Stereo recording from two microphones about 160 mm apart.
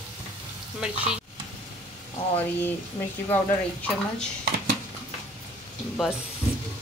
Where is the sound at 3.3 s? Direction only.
10° left (ahead or behind).